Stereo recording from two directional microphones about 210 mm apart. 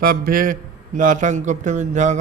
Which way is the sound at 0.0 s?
45° right (ahead or behind).